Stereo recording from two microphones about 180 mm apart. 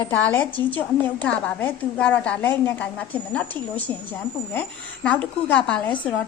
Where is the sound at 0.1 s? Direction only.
10° left (ahead or behind).